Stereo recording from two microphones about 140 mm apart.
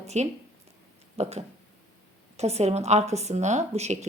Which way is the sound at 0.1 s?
55° right (ahead or behind).